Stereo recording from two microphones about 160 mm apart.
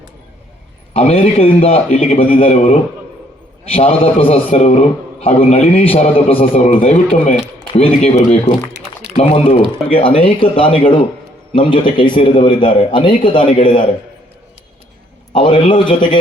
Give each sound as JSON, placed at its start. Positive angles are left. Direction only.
{"t": 0.9, "sound": "a man's voice", "side_deg": 40}
{"t": 15.3, "sound": "a man's voice", "side_deg": 30}